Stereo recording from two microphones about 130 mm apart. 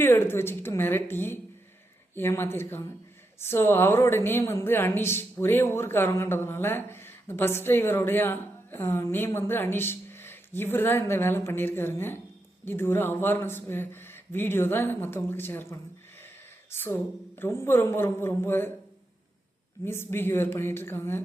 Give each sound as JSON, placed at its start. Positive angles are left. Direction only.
{"t": 0.0, "sound": "a woman's voice", "side_deg": 20}
{"t": 19.8, "sound": "a woman's voice", "side_deg": 20}